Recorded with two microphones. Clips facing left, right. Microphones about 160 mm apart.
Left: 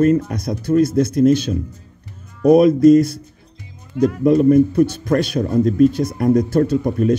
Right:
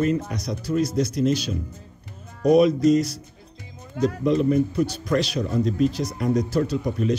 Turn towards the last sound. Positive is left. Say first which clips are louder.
# left 7 dB
turn(degrees=50)  # may be behind; listen again after turning